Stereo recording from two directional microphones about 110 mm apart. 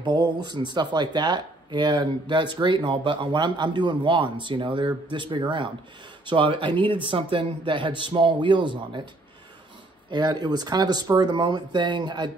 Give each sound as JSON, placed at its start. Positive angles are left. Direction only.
{"t": 0.0, "sound": "speech", "side_deg": -40}
{"t": 10.1, "sound": "speech", "side_deg": -40}